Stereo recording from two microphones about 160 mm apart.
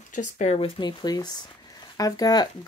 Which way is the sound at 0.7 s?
25° left (ahead or behind).